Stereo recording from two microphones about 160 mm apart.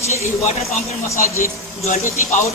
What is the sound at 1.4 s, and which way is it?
Speech, 55° left (ahead or behind).